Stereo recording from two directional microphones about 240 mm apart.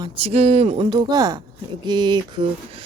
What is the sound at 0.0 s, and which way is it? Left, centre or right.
A woman's voice, right.